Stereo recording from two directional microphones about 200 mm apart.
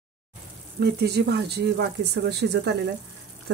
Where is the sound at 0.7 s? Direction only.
50° right (ahead or behind).